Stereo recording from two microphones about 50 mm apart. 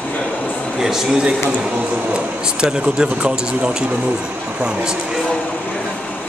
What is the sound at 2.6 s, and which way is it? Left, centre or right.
Speech, centre.